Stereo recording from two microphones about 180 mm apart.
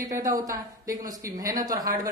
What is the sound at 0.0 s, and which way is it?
Speech, 20° right (ahead or behind).